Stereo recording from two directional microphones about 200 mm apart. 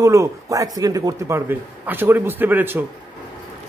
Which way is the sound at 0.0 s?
15° right (ahead or behind).